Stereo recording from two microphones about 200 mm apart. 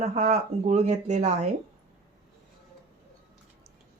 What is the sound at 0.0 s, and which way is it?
Speech, 35° right (ahead or behind).